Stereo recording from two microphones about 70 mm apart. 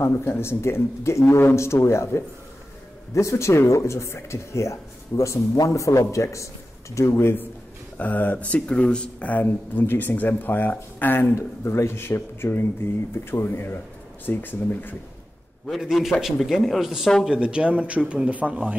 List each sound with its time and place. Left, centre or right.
0.2 s speech: left
8.0 s speech: left
11.3 s speech: left
15.8 s speech: centre